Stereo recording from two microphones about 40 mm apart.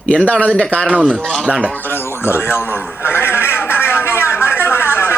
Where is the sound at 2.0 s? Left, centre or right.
Left.